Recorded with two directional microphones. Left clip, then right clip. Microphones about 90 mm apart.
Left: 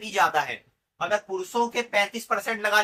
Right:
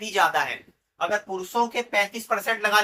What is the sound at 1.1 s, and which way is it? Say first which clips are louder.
Speech: even; 10° right (ahead or behind).